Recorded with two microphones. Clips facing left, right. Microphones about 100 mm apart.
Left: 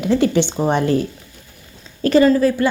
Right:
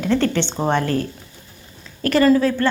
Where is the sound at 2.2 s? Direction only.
5° left (ahead or behind).